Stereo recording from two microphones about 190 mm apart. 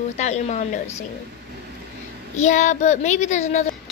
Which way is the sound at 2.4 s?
40° left (ahead or behind).